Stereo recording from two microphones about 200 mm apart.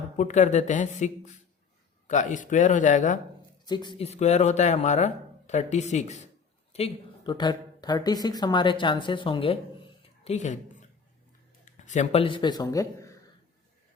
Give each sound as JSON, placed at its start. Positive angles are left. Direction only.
{"t": 0.2, "sound": "speech", "side_deg": 35}
{"t": 3.7, "sound": "speech", "side_deg": 20}
{"t": 11.6, "sound": "speech", "side_deg": 35}